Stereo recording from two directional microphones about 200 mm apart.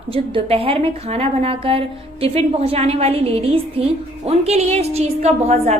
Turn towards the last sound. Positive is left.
turn(degrees=-35)  # may be behind; listen again after turning